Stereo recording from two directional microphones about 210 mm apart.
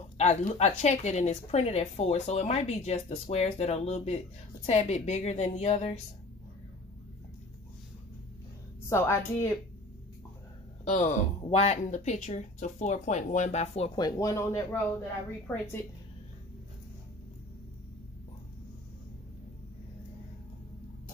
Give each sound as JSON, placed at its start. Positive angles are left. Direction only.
{"t": 0.2, "sound": "a woman's voice", "side_deg": 30}
{"t": 8.8, "sound": "speech", "side_deg": 15}
{"t": 10.9, "sound": "a woman's voice", "side_deg": 35}
{"t": 14.0, "sound": "speech", "side_deg": 15}